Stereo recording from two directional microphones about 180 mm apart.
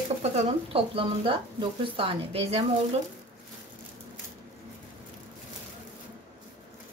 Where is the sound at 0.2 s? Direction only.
35° right (ahead or behind).